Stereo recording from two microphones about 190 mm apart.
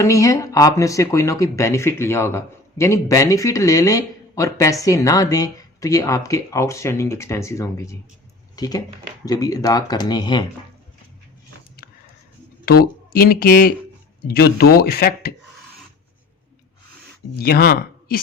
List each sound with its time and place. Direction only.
0.0 s speech: 15° left (ahead or behind)
11.8 s a sound: 50° left (ahead or behind)
12.6 s speech: 55° left (ahead or behind)
17.3 s speech: 55° left (ahead or behind)